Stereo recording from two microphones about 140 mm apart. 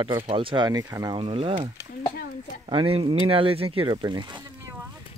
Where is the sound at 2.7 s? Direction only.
40° right (ahead or behind).